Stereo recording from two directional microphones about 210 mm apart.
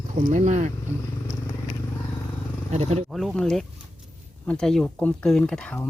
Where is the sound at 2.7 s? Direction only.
30° right (ahead or behind).